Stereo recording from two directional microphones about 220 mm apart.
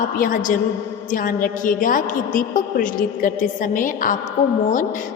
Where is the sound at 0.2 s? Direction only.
40° left (ahead or behind).